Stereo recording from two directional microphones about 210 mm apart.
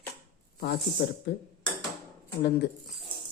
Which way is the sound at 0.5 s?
50° left (ahead or behind).